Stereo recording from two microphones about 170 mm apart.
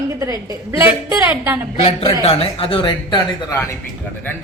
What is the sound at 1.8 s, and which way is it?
Speech, 35° left (ahead or behind).